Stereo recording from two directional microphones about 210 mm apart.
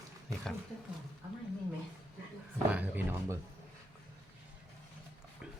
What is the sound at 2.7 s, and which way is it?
Speech, 10° right (ahead or behind).